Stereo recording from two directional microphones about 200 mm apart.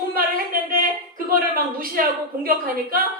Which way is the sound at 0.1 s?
45° right (ahead or behind).